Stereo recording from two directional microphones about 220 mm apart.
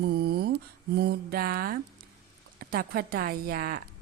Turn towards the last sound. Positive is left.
turn(degrees=-45)  # may be behind; listen again after turning